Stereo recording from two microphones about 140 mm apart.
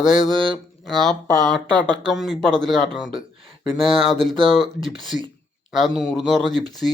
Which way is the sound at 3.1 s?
40° right (ahead or behind).